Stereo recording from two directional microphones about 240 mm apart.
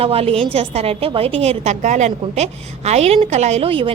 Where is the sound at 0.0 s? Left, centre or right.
Right.